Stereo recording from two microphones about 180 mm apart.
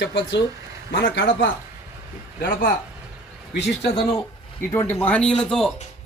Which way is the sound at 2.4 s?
50° left (ahead or behind).